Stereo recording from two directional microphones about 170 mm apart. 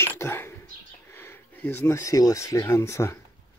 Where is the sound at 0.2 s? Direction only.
15° left (ahead or behind).